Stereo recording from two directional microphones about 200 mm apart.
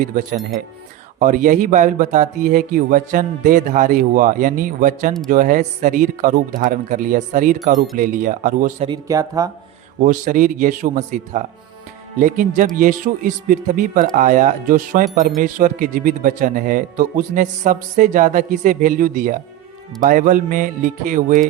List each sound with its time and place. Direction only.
0.0 s speech: 40° right (ahead or behind)
8.9 s speech: 15° right (ahead or behind)
10.0 s speech: 40° right (ahead or behind)